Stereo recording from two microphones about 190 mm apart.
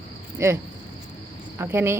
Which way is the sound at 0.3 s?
15° right (ahead or behind).